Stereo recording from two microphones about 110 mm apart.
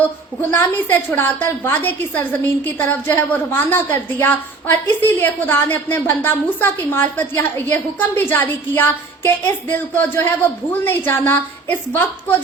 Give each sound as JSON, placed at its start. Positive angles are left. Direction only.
{"t": 0.5, "sound": "a woman's voice", "side_deg": 20}